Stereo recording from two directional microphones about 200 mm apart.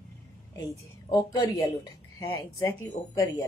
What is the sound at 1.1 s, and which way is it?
Speech, 15° left (ahead or behind).